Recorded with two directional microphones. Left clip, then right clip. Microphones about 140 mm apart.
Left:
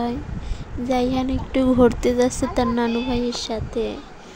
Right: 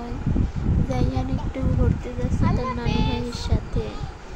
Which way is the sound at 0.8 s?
65° left (ahead or behind).